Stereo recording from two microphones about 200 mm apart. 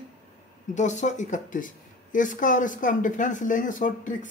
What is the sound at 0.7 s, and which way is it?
A man's voice, 35° left (ahead or behind).